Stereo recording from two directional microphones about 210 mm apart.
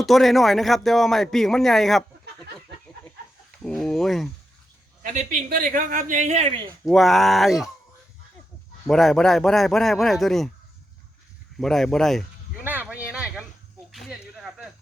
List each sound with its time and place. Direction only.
0.0 s speech: centre (ahead or behind)
3.6 s a sound: centre (ahead or behind)
5.1 s speech: 40° right (ahead or behind)
6.8 s speech: centre (ahead or behind)
8.9 s speech: centre (ahead or behind)
11.5 s speech: centre (ahead or behind)
12.6 s a sound: 10° right (ahead or behind)